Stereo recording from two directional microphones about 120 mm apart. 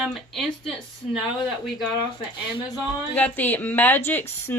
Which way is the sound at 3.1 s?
15° left (ahead or behind).